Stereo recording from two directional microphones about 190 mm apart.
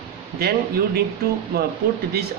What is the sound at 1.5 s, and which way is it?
Speech, 55° right (ahead or behind).